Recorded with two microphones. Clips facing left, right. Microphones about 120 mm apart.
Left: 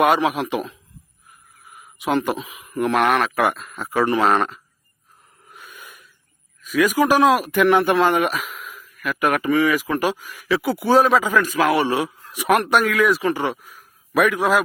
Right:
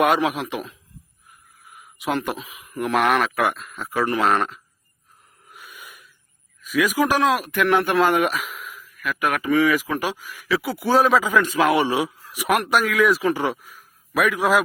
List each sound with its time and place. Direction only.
0.0 s speech: centre (ahead or behind)
5.5 s snort: 5° right (ahead or behind)
6.6 s speech: centre (ahead or behind)
11.4 s speech: 25° right (ahead or behind); by 14.6 s centre (ahead or behind)